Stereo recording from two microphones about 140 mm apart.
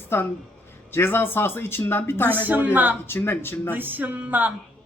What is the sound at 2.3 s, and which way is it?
Speech, 15° right (ahead or behind).